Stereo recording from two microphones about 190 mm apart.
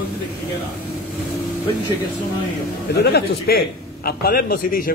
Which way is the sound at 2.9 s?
60° left (ahead or behind).